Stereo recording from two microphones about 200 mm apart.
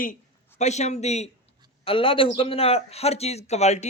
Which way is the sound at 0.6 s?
35° left (ahead or behind).